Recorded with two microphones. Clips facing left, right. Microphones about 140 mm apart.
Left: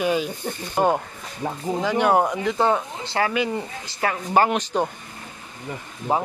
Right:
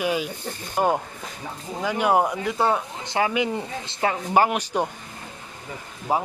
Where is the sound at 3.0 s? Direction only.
15° right (ahead or behind).